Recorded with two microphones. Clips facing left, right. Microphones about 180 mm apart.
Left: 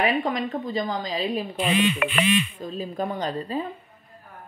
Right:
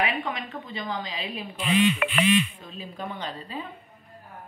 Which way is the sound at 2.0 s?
50° left (ahead or behind).